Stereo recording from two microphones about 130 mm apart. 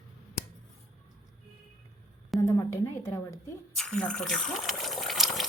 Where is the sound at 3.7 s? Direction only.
5° left (ahead or behind).